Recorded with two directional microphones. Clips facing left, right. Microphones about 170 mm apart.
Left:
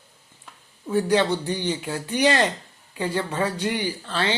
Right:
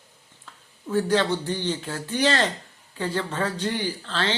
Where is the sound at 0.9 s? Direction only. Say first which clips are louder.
Left 2 dB; 15° left (ahead or behind).